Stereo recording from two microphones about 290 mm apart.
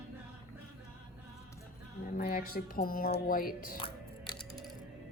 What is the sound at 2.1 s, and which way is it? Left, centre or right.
Speech, left.